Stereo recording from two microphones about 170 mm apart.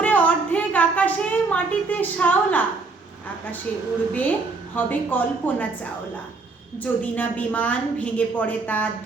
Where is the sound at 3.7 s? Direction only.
5° left (ahead or behind).